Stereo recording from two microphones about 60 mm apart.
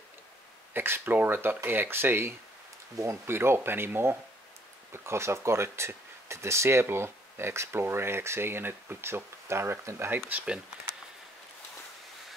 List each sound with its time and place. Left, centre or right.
0.7 s speech: right